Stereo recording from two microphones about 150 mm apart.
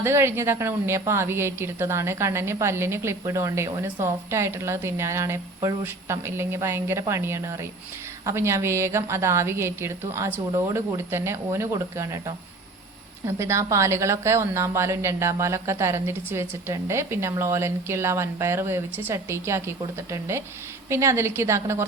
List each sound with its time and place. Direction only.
0.0 s a woman's voice: 15° right (ahead or behind)